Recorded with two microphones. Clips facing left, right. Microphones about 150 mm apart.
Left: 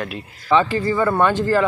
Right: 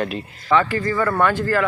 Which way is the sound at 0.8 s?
15° left (ahead or behind).